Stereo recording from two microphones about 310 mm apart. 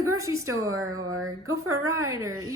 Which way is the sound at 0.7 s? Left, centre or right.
Right.